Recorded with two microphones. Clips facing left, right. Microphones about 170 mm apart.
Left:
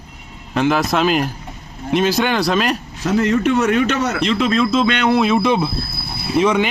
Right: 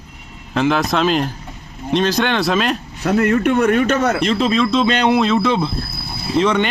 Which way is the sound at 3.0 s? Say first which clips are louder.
Right 1 dB; 55° right (ahead or behind).